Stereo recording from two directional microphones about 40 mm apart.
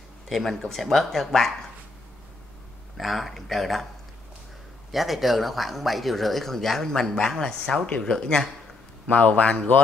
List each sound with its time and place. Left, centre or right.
0.3 s speech: centre
3.0 s speech: centre
4.9 s speech: centre
9.0 s a man's voice: left